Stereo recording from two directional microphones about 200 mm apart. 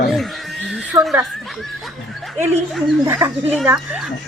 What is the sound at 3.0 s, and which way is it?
Speech, 10° right (ahead or behind).